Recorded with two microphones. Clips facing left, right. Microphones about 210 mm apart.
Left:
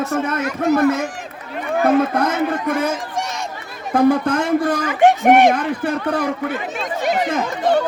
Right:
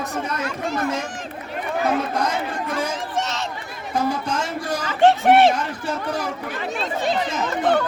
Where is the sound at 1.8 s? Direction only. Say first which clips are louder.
Left 7 dB; 55° left (ahead or behind).